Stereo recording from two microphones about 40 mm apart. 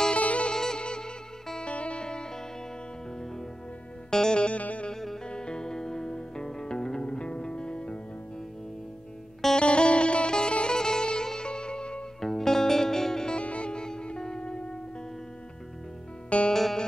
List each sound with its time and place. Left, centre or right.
0.1 s music: left
0.5 s music: centre
4.1 s music: centre
4.6 s music: left
5.3 s music: left
9.6 s music: left
12.2 s music: centre
13.4 s music: left
16.3 s music: left
16.5 s music: centre